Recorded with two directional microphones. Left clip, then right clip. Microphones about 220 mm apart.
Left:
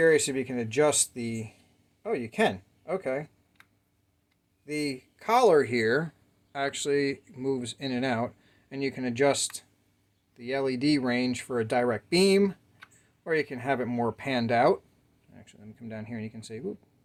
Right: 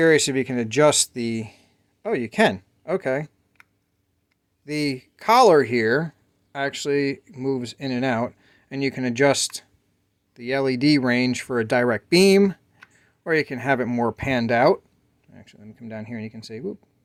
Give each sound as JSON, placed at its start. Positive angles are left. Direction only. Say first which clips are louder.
{"t": 0.0, "sound": "speech", "louder": "right 5 dB", "side_deg": -40}